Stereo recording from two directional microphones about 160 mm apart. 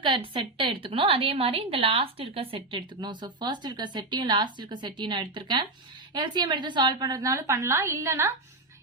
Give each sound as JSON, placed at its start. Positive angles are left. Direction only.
{"t": 0.3, "sound": "a woman's voice", "side_deg": -30}